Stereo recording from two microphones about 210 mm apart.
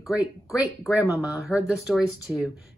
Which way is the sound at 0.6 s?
15° left (ahead or behind).